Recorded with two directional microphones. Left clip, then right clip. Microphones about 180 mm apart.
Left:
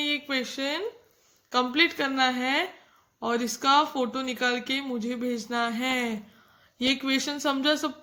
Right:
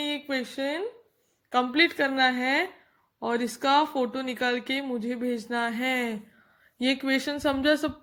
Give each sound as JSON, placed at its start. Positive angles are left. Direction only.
{"t": 0.0, "sound": "speech", "side_deg": -30}